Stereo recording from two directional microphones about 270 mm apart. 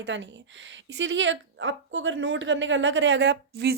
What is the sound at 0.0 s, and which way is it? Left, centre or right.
Speech, right.